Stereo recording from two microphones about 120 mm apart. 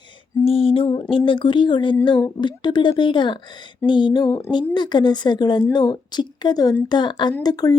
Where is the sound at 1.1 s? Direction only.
45° left (ahead or behind).